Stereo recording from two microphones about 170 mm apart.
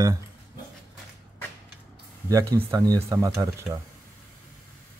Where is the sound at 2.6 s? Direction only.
25° right (ahead or behind).